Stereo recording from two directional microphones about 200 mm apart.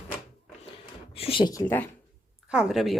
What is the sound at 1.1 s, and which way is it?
Speech, 25° left (ahead or behind).